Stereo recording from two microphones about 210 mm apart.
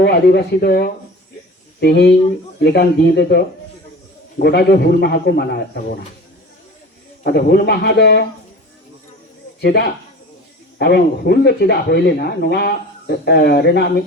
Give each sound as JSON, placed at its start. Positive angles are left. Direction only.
{"t": 0.0, "sound": "speech", "side_deg": 50}
{"t": 7.3, "sound": "speech", "side_deg": 50}
{"t": 9.6, "sound": "speech", "side_deg": 50}